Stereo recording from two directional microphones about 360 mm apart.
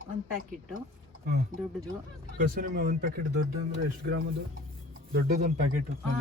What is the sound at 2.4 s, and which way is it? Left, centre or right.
Speech, right.